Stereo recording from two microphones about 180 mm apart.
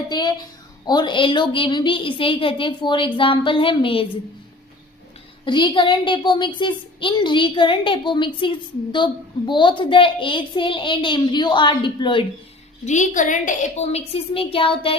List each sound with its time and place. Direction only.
0.1 s a woman's voice: 20° left (ahead or behind)
5.5 s a woman's voice: 25° left (ahead or behind)
12.8 s a woman's voice: 40° left (ahead or behind)